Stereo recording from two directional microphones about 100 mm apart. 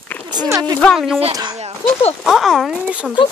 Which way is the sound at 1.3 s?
40° right (ahead or behind).